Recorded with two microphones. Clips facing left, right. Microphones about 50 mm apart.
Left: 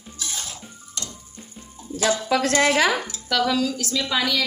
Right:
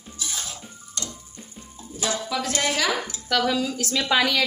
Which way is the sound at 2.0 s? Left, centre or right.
Left.